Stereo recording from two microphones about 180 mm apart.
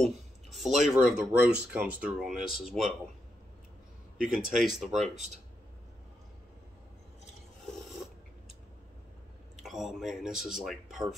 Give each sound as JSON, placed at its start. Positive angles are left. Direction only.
{"t": 0.0, "sound": "a sound", "side_deg": 0}
{"t": 0.8, "sound": "speech", "side_deg": -5}
{"t": 4.2, "sound": "speech", "side_deg": -5}
{"t": 5.0, "sound": "speech", "side_deg": -40}
{"t": 7.6, "sound": "a sound", "side_deg": 0}
{"t": 9.6, "sound": "speech", "side_deg": 0}